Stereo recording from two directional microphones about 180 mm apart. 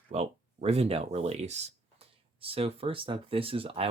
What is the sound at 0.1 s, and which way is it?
Speech, 35° right (ahead or behind).